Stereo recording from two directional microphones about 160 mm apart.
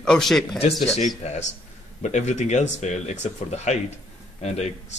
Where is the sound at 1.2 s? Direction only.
45° left (ahead or behind).